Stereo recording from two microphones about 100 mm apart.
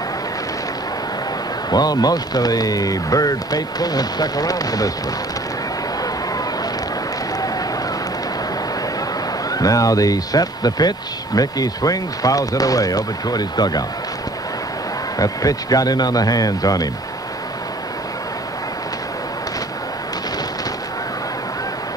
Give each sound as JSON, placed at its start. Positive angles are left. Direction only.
{"t": 1.7, "sound": "speech", "side_deg": 40}
{"t": 9.5, "sound": "speech", "side_deg": 35}
{"t": 15.1, "sound": "speech", "side_deg": 40}